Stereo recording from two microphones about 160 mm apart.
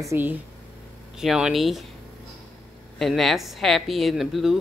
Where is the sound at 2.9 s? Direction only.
Centre (ahead or behind).